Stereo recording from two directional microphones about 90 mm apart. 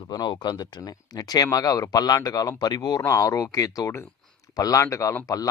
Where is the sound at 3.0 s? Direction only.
35° left (ahead or behind).